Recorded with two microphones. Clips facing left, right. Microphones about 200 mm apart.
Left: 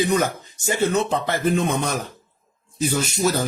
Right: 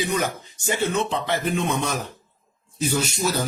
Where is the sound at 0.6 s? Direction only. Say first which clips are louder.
Left 3 dB; 40° left (ahead or behind).